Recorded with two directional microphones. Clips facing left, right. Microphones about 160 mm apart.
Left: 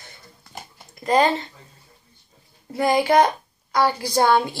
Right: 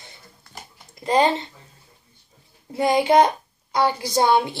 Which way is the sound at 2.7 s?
25° right (ahead or behind).